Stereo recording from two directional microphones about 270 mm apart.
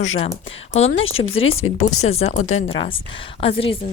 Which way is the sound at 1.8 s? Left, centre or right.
Left.